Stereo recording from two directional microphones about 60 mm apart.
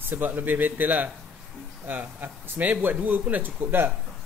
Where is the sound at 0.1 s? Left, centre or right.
Right.